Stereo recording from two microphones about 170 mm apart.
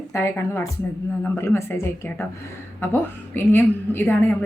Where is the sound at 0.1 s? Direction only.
15° left (ahead or behind).